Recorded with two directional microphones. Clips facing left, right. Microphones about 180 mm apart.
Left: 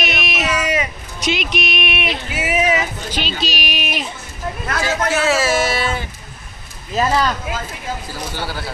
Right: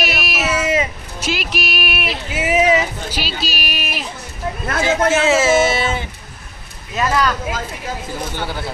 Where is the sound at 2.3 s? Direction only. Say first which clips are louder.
Right 4 dB; 25° right (ahead or behind).